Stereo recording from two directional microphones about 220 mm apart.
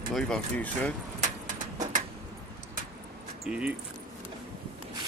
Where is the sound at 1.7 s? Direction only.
35° right (ahead or behind).